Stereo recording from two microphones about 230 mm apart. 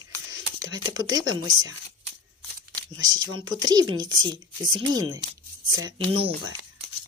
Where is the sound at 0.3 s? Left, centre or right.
Right.